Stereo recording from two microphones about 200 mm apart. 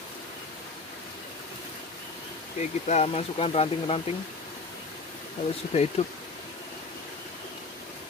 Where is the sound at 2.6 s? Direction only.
35° left (ahead or behind).